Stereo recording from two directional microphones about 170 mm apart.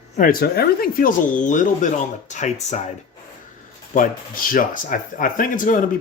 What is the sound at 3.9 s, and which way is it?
Speech, 55° left (ahead or behind).